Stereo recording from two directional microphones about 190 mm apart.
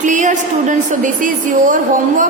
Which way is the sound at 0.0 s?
40° right (ahead or behind).